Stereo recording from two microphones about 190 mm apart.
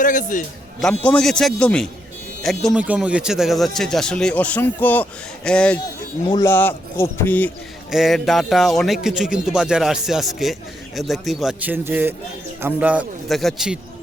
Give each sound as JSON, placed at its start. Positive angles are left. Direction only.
{"t": 0.0, "sound": "a man's voice", "side_deg": 45}
{"t": 0.8, "sound": "a man's voice", "side_deg": 5}
{"t": 7.9, "sound": "a man's voice", "side_deg": 0}